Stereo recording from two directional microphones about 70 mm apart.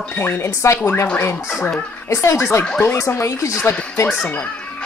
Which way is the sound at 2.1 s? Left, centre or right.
Left.